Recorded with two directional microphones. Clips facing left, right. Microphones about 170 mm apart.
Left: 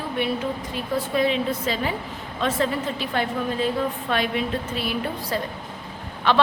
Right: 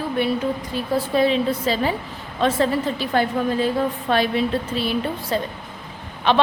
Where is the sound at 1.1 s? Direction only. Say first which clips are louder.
Right 4 dB; 35° right (ahead or behind).